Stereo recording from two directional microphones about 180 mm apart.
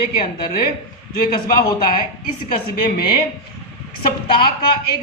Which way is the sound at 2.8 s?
60° left (ahead or behind).